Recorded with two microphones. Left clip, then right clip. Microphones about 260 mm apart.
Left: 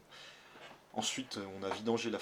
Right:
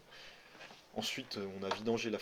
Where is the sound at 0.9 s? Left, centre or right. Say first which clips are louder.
Left 2 dB; right.